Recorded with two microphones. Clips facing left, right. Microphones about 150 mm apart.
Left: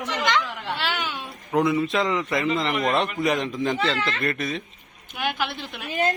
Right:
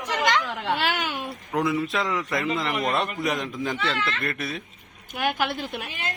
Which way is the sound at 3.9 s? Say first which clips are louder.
Left 1 dB; 35° left (ahead or behind).